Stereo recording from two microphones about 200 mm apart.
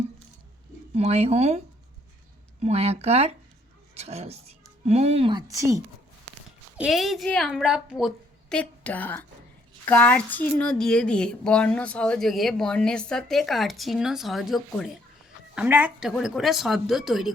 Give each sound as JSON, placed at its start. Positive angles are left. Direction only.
{"t": 0.9, "sound": "speech", "side_deg": -30}
{"t": 5.5, "sound": "a woman's voice", "side_deg": -15}
{"t": 6.7, "sound": "speech", "side_deg": 0}